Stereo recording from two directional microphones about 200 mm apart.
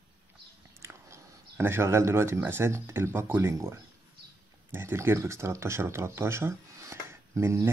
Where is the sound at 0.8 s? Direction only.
15° right (ahead or behind).